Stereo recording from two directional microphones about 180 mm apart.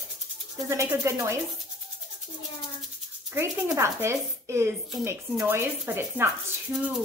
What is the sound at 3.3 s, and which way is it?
A woman's voice, 10° right (ahead or behind).